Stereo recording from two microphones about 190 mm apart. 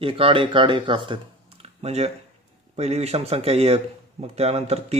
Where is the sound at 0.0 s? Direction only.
30° right (ahead or behind).